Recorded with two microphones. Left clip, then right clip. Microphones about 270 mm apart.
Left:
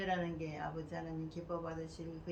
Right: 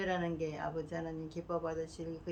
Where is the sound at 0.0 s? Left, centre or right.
Centre.